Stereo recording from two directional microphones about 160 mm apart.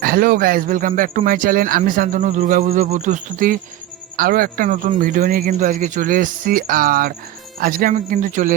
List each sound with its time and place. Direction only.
0.0 s speech: 65° right (ahead or behind)
2.6 s speech: 40° right (ahead or behind); by 5.5 s 65° right (ahead or behind)
5.5 s speech: 50° right (ahead or behind)